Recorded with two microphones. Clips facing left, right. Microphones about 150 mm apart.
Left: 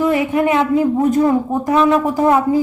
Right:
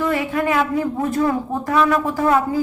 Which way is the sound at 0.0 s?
20° left (ahead or behind).